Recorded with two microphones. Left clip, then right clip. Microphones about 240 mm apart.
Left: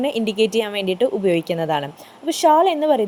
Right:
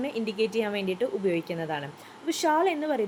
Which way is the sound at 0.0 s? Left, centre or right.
Left.